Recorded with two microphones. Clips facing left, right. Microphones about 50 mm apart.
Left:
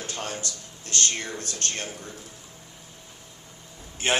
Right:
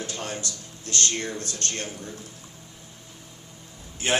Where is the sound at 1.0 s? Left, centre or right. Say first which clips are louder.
Right 3 dB; left.